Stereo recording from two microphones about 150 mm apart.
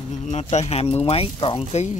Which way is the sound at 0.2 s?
50° left (ahead or behind).